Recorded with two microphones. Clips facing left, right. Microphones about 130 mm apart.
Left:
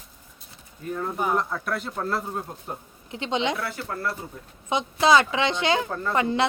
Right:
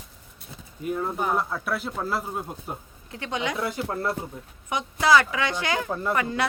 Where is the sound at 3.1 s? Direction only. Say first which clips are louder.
Left 3 dB; 20° left (ahead or behind).